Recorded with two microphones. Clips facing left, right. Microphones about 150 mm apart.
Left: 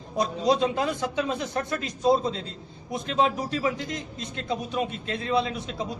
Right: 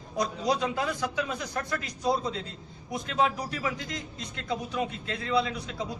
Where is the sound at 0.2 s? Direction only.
25° left (ahead or behind).